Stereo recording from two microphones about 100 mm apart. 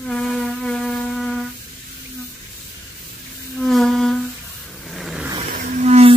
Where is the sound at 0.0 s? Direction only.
5° left (ahead or behind).